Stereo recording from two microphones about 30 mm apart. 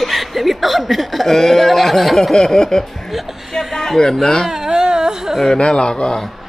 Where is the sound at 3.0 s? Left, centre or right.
Centre.